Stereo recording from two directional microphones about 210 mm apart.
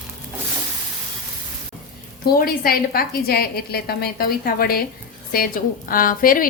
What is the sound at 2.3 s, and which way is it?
A woman's voice, 45° left (ahead or behind).